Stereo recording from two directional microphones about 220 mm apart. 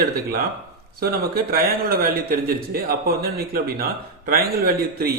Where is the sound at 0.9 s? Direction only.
45° right (ahead or behind).